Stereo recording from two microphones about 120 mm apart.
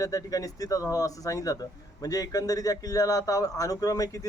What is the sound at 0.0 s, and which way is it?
Speech, 30° left (ahead or behind).